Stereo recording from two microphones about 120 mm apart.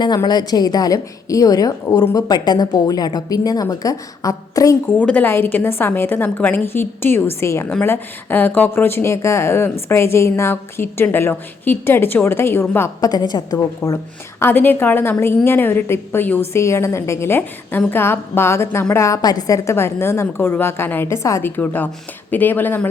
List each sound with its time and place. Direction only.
0.0 s a woman's voice: 35° left (ahead or behind)
4.9 s a woman's voice: 15° left (ahead or behind)
13.1 s a woman's voice: 35° left (ahead or behind)
14.4 s a woman's voice: 15° left (ahead or behind)